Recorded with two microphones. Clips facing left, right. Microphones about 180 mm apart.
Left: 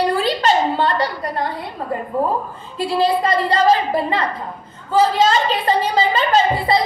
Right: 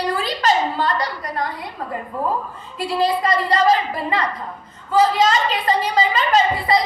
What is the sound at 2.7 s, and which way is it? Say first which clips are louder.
A woman's voice: left 2 dB; 30° left (ahead or behind).